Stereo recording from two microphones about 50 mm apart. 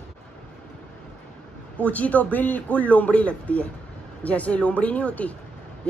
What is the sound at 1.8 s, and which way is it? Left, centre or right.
A man's voice, left.